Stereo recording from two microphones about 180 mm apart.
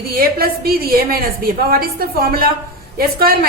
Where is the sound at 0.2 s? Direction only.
55° right (ahead or behind).